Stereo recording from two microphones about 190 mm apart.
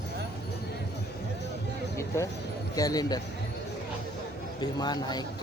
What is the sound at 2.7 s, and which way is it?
Speech, 20° left (ahead or behind).